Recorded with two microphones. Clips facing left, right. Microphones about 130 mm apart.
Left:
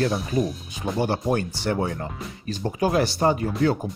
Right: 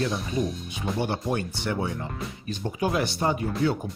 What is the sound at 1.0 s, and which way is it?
Speech, 40° left (ahead or behind).